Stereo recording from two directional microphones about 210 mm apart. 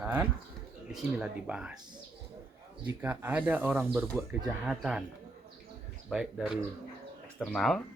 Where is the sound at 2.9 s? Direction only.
10° right (ahead or behind).